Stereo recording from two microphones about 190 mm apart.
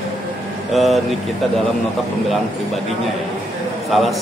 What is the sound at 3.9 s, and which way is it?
Speech, centre (ahead or behind).